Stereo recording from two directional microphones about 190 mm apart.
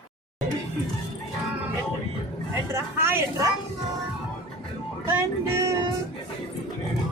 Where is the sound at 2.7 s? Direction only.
15° right (ahead or behind).